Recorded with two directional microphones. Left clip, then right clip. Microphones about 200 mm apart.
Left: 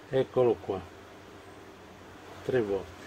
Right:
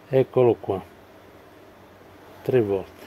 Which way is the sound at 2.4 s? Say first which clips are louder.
Right 7 dB; 40° right (ahead or behind).